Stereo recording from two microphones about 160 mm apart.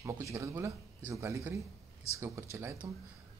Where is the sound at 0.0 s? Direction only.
20° right (ahead or behind).